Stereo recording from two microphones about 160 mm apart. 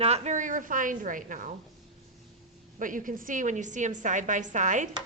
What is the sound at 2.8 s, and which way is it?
A woman's voice, 55° right (ahead or behind).